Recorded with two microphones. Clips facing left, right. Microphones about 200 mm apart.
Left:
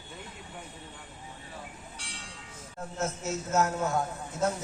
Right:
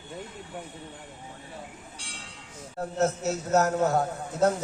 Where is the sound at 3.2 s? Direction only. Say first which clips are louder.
Even; 40° right (ahead or behind).